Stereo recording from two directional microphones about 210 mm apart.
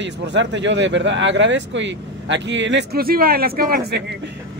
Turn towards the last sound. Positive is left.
turn(degrees=-50)  # may be behind; listen again after turning